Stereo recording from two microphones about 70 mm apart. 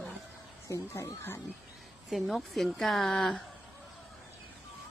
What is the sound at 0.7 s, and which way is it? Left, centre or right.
Speech, left.